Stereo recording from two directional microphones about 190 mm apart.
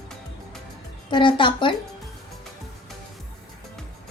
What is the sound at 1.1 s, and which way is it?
Speech, 25° left (ahead or behind).